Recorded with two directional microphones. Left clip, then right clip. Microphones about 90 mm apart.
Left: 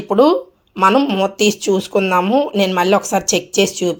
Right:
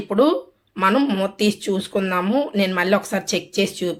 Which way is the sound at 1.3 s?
30° left (ahead or behind).